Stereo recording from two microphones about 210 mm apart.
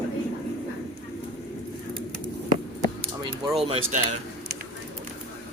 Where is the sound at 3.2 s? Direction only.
30° right (ahead or behind).